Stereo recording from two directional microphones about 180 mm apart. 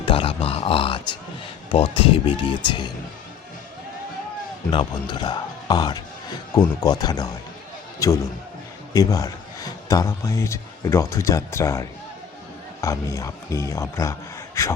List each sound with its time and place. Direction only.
0.0 s a sound: 30° left (ahead or behind)
1.7 s speech: 30° left (ahead or behind)
4.7 s a man's voice: 25° left (ahead or behind)